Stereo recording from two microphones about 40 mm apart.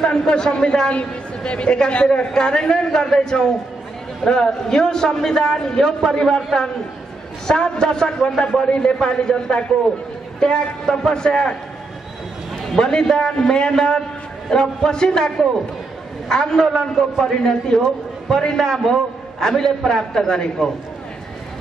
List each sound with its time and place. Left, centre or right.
0.0 s a man's voice: centre
12.7 s a man's voice: centre